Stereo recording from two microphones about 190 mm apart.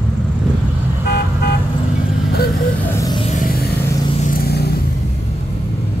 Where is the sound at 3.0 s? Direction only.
20° left (ahead or behind).